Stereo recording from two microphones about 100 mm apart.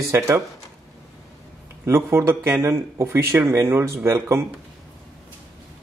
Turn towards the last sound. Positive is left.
turn(degrees=-25)  # may be behind; listen again after turning